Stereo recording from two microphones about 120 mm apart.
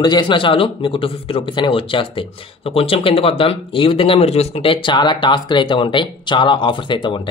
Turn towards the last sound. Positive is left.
turn(degrees=40)  # may be behind; listen again after turning